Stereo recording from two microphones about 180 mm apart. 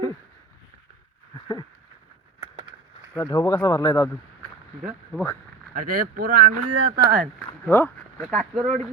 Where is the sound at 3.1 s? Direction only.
20° left (ahead or behind).